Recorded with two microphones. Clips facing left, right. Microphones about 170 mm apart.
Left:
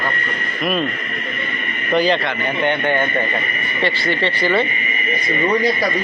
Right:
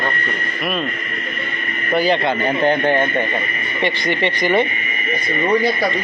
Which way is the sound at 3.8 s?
15° right (ahead or behind).